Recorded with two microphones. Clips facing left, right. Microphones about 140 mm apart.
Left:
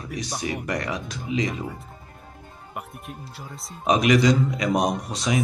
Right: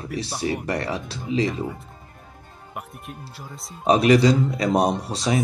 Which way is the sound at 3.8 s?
35° right (ahead or behind).